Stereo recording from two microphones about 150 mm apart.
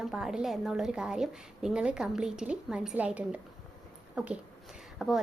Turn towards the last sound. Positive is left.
turn(degrees=0)  # may be behind; listen again after turning